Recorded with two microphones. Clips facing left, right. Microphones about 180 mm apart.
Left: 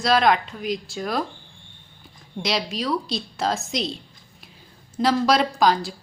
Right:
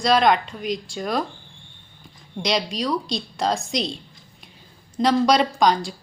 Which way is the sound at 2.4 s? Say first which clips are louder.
Right 2 dB; centre (ahead or behind).